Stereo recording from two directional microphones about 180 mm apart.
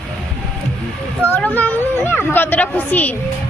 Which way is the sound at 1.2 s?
10° left (ahead or behind).